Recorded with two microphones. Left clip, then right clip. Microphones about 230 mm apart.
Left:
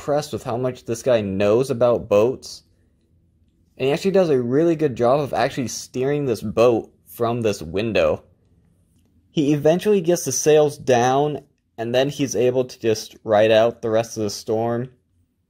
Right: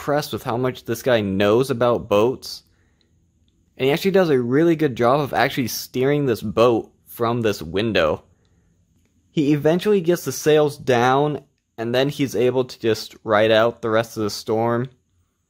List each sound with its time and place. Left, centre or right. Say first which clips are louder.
0.0 s speech: even; centre
3.7 s speech: right 1 dB; centre
9.3 s speech: left 1 dB; centre